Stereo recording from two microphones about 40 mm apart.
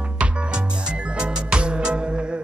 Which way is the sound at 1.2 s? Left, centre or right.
Right.